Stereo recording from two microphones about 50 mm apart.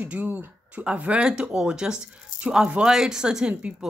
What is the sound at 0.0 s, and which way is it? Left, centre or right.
A woman's voice, right.